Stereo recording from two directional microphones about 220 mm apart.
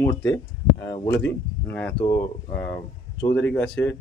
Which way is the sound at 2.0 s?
20° left (ahead or behind).